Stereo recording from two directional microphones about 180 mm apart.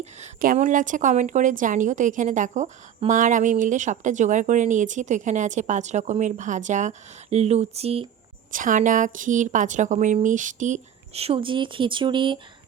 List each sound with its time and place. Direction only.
0.0 s a woman's voice: 40° right (ahead or behind)
8.5 s a woman's voice: 45° right (ahead or behind); by 12.4 s 25° right (ahead or behind)